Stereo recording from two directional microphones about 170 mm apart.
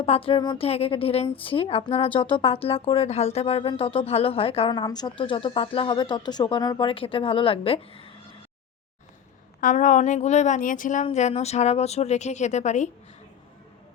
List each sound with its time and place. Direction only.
0.0 s speech: 35° left (ahead or behind)
9.6 s a woman's voice: 50° left (ahead or behind)